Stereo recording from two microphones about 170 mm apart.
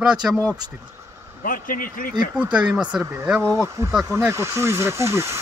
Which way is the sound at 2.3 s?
5° right (ahead or behind).